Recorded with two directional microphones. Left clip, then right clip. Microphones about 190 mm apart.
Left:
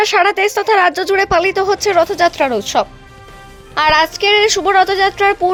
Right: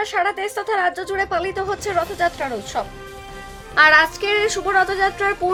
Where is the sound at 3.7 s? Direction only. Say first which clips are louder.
Left 1 dB; 20° left (ahead or behind).